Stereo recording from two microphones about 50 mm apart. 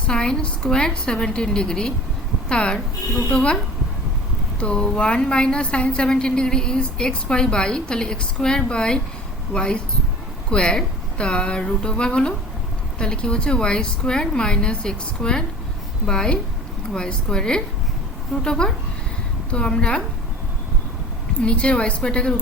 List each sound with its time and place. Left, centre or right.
0.1 s a woman's voice: centre
4.7 s a woman's voice: centre
21.3 s a woman's voice: left